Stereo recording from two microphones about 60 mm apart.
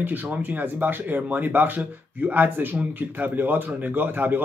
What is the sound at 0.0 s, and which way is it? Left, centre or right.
Speech, right.